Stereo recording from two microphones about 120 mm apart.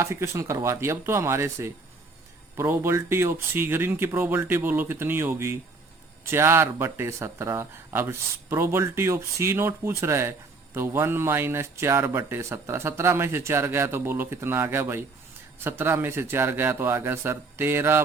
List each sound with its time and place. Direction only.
0.0 s speech: 25° right (ahead or behind)